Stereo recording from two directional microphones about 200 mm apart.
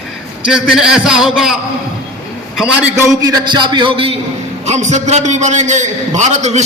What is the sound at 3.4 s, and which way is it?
Speech, 25° right (ahead or behind).